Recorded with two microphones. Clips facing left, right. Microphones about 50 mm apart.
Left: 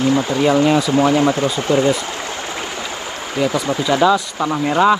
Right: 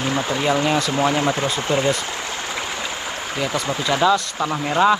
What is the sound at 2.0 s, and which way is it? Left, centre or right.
Stream, left.